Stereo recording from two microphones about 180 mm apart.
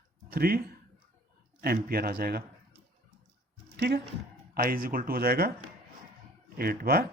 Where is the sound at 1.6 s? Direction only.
60° right (ahead or behind).